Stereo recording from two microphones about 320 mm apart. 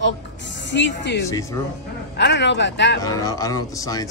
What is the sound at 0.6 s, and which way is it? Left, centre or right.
Speech, left.